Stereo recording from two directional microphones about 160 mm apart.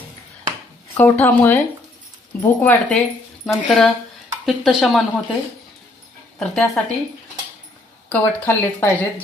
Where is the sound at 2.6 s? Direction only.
10° left (ahead or behind).